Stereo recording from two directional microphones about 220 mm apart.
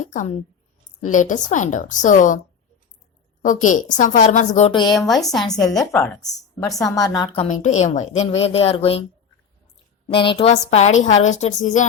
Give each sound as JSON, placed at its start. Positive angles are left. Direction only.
{"t": 0.0, "sound": "a woman's voice", "side_deg": 35}
{"t": 3.4, "sound": "a woman's voice", "side_deg": 35}
{"t": 4.9, "sound": "a woman's voice", "side_deg": 0}
{"t": 5.5, "sound": "a woman's voice", "side_deg": 15}
{"t": 7.3, "sound": "a woman's voice", "side_deg": 30}
{"t": 10.1, "sound": "a woman's voice", "side_deg": 25}